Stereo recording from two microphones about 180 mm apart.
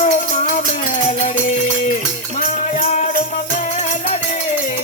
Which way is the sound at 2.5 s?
45° left (ahead or behind).